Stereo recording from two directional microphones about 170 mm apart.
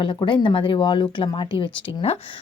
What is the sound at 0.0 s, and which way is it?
A woman's voice, 30° left (ahead or behind).